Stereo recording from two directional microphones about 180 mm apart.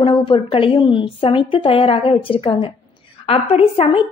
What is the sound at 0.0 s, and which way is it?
A woman's voice, 30° left (ahead or behind).